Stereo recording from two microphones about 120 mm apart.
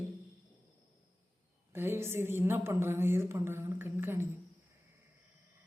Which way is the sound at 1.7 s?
20° right (ahead or behind).